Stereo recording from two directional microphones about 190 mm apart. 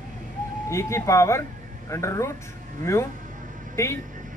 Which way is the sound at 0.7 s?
15° left (ahead or behind).